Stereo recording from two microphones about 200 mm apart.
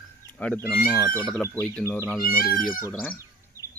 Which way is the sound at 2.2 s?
45° left (ahead or behind).